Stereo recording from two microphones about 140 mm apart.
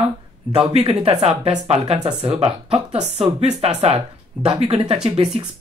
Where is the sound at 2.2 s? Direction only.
45° right (ahead or behind).